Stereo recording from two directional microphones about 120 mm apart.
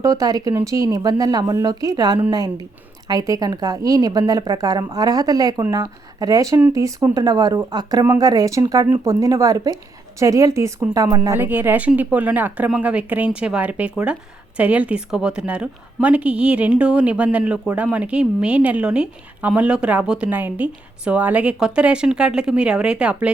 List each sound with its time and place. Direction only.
0.0 s a woman's voice: 30° right (ahead or behind)
11.3 s speech: 15° right (ahead or behind)